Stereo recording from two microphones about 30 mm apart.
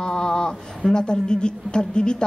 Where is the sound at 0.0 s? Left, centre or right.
Left.